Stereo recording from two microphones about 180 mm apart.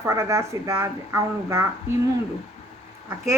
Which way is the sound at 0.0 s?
15° right (ahead or behind).